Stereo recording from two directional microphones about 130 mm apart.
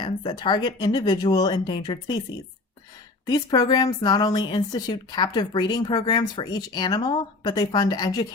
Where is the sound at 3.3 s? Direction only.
30° left (ahead or behind).